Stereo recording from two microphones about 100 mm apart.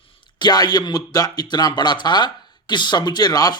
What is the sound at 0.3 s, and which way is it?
Speech, 45° left (ahead or behind).